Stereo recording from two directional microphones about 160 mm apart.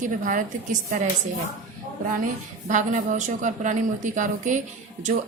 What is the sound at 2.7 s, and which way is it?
A woman's voice, 55° right (ahead or behind).